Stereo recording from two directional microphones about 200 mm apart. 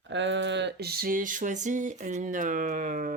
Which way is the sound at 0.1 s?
65° right (ahead or behind).